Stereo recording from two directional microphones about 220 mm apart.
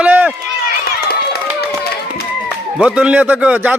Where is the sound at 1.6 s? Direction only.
45° left (ahead or behind).